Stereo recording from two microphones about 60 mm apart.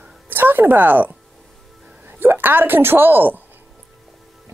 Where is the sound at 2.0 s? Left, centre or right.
Right.